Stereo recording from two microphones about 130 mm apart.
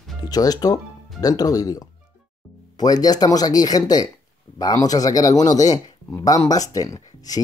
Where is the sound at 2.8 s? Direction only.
30° left (ahead or behind).